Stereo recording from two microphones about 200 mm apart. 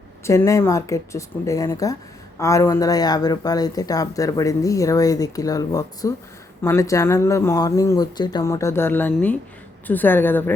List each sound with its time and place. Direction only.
0.3 s speech: 15° left (ahead or behind)